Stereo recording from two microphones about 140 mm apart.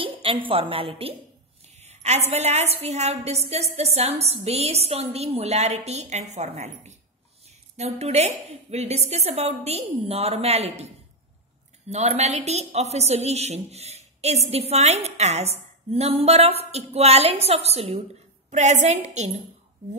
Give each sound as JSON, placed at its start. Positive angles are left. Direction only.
{"t": 0.0, "sound": "a woman's voice", "side_deg": -40}
{"t": 11.9, "sound": "a woman's voice", "side_deg": -55}